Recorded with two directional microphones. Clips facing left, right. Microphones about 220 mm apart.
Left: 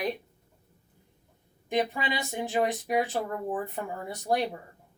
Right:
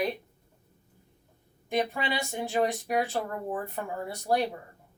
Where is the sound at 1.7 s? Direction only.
15° left (ahead or behind).